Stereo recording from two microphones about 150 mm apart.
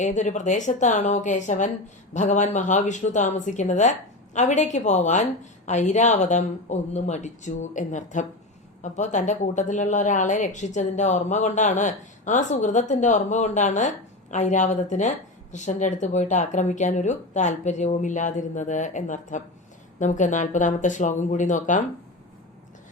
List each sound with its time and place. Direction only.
0.0 s a woman's voice: 55° left (ahead or behind)